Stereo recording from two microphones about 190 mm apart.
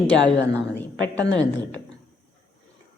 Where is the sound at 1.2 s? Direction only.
80° left.